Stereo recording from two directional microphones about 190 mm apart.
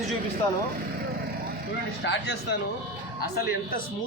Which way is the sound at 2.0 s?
70° left (ahead or behind).